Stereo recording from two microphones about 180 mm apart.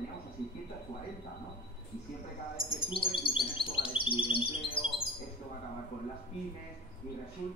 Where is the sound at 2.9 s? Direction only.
30° left (ahead or behind).